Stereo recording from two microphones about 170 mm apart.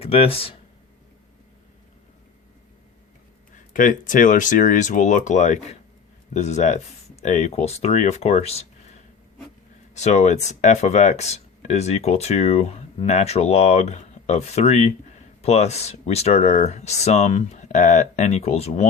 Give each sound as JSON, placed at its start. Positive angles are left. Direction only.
{"t": 0.0, "sound": "speech", "side_deg": 35}
{"t": 3.7, "sound": "speech", "side_deg": 50}